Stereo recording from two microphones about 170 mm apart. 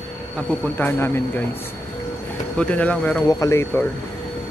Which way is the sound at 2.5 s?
5° left (ahead or behind).